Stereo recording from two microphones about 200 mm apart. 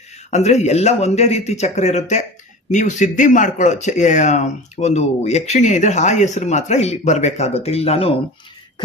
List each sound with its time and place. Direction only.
0.3 s speech: 35° left (ahead or behind)